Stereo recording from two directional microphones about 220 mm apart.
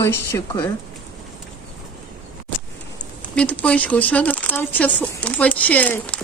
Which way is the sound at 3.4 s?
5° left (ahead or behind).